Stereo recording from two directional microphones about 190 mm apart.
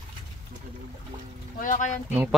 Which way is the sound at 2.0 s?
10° right (ahead or behind).